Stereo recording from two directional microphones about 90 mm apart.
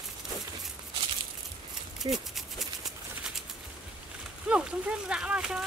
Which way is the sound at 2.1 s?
Centre (ahead or behind).